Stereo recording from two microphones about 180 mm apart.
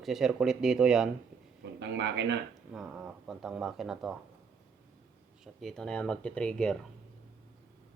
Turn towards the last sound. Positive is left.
turn(degrees=5)  # may be behind; listen again after turning